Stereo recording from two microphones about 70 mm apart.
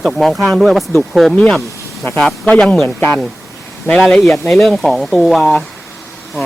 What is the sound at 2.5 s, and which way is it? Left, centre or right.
Speech, left.